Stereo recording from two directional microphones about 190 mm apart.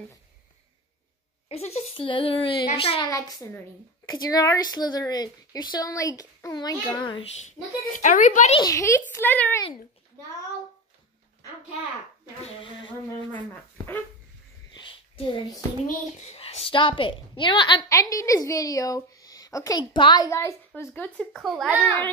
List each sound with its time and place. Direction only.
1.5 s a woman's voice: 35° left (ahead or behind)
3.1 s a woman's voice: 15° left (ahead or behind)
7.9 s speech: 40° left (ahead or behind)
8.5 s a woman's voice: 15° left (ahead or behind)
12.4 s a woman's voice: 25° left (ahead or behind)
13.5 s speech: 10° left (ahead or behind)
14.7 s a sound: 25° left (ahead or behind)
15.9 s a woman's voice: 35° left (ahead or behind); by 21.8 s 5° right (ahead or behind)
21.8 s a woman's voice: 10° left (ahead or behind)